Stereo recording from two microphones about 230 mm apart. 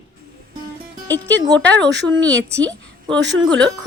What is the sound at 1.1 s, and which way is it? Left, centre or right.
Speech, centre.